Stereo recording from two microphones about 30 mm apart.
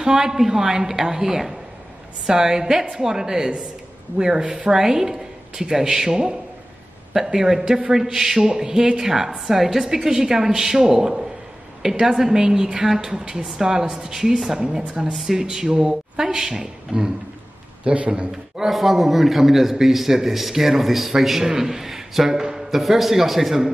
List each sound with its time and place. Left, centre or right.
0.0 s a man's voice: centre
7.3 s a man's voice: centre
9.5 s a man's voice: centre
13.2 s speech: right
14.8 s a man's voice: right
17.9 s speech: right
18.7 s a man's voice: centre
22.8 s a man's voice: centre